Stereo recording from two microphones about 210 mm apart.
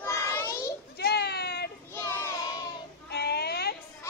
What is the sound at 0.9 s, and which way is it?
Baby cry, 50° left (ahead or behind).